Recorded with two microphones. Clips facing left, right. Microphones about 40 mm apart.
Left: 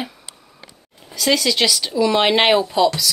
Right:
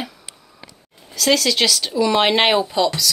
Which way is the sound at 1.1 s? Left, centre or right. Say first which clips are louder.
Right 1 dB; centre.